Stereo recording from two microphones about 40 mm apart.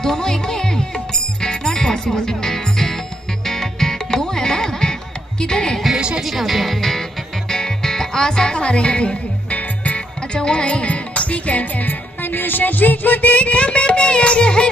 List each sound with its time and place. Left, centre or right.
0.0 s music: centre
5.9 s music: right
6.2 s music: centre; by 9.2 s left
9.5 s music: left